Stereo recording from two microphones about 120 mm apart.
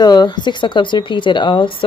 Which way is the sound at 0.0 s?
35° left (ahead or behind).